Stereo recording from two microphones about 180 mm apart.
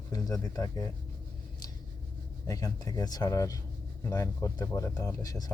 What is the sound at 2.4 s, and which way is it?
Speech, 20° left (ahead or behind).